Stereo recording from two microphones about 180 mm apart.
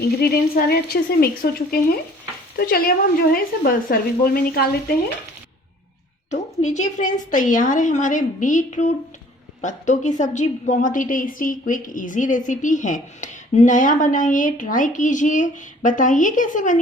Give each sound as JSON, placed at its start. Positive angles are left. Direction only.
{"t": 0.0, "sound": "a woman's voice", "side_deg": 60}
{"t": 6.3, "sound": "a woman's voice", "side_deg": 40}